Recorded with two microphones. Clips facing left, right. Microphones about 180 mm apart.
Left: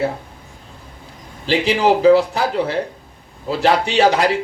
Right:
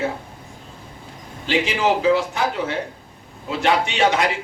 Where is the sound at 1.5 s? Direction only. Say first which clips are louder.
Left 4 dB; 35° left (ahead or behind).